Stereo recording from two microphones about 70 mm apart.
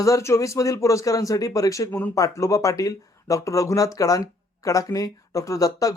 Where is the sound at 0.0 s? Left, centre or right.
Left.